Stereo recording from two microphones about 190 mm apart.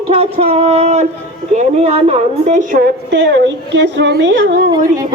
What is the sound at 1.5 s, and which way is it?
A woman's voice, 35° right (ahead or behind).